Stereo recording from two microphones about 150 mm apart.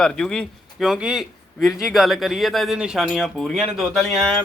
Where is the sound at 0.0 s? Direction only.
5° left (ahead or behind).